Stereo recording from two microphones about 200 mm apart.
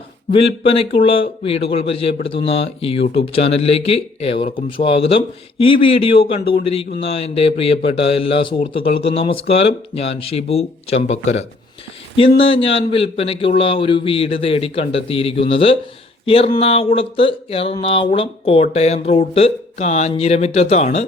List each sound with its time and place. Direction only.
0.3 s speech: 25° left (ahead or behind)